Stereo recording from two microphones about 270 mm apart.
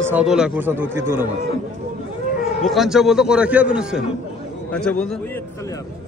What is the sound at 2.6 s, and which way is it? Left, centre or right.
A man's voice, centre.